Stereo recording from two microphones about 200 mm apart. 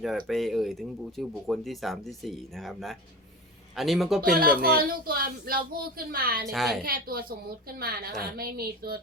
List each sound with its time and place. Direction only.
0.0 s speech: centre (ahead or behind)
4.2 s a woman's voice: 45° right (ahead or behind)
6.5 s speech: centre (ahead or behind)
6.8 s a woman's voice: 45° right (ahead or behind)